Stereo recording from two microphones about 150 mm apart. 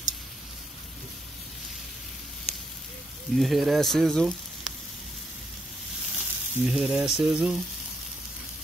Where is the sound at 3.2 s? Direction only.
Centre (ahead or behind).